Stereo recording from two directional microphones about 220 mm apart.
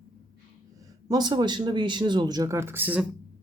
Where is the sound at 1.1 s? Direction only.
20° right (ahead or behind).